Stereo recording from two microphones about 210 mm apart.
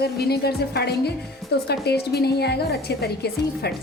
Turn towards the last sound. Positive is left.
turn(degrees=50)  # may be behind; listen again after turning